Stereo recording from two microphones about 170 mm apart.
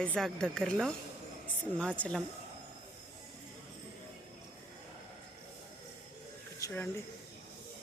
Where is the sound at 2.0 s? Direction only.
5° left (ahead or behind).